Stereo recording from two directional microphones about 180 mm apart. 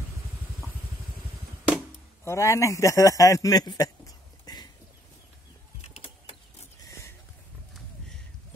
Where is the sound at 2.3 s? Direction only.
15° left (ahead or behind).